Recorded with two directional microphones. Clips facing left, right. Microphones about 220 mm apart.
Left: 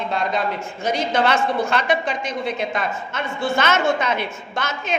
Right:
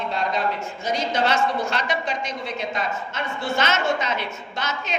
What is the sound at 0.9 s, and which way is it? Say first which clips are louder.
A woman's voice: left 2 dB; 55° left (ahead or behind).